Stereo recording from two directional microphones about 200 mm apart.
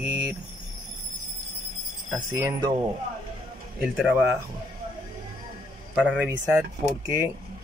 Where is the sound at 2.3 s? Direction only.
15° right (ahead or behind).